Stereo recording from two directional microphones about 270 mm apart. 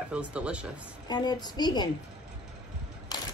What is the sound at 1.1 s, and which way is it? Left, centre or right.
Speech, centre.